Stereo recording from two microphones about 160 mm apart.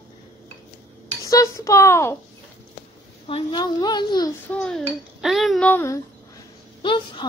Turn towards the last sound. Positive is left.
turn(degrees=30)  # may be behind; listen again after turning